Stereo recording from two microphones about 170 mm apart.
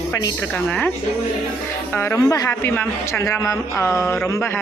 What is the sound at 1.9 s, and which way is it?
A man's voice, 15° left (ahead or behind).